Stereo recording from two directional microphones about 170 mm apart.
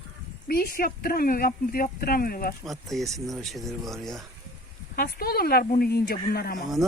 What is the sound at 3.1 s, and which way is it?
Speech, 20° right (ahead or behind).